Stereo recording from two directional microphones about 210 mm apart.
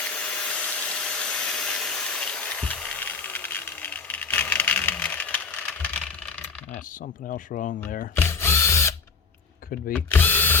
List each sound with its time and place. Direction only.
0.1 s a sound: 5° left (ahead or behind)
7.3 s speech: 40° left (ahead or behind)
8.1 s drill: 10° left (ahead or behind)
9.9 s speech: 10° left (ahead or behind)